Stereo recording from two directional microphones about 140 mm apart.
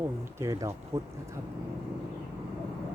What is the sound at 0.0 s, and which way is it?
Speech, 20° right (ahead or behind).